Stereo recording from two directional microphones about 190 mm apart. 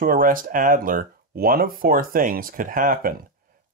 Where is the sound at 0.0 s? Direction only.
50° right (ahead or behind).